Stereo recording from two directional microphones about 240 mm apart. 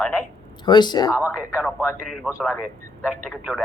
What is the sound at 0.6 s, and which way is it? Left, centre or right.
Speech, centre.